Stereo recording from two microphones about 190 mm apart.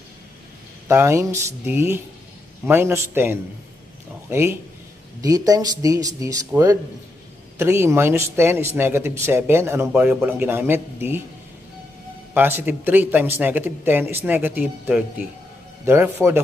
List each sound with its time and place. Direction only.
0.8 s speech: 15° right (ahead or behind)
12.4 s a man's voice: 10° right (ahead or behind)